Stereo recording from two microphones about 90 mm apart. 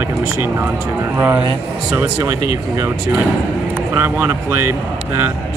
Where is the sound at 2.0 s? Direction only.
35° right (ahead or behind).